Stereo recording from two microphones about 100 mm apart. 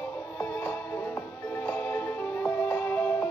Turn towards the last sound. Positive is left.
turn(degrees=20)  # may be behind; listen again after turning